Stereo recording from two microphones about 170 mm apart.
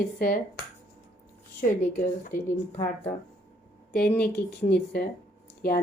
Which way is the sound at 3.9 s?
65° left (ahead or behind).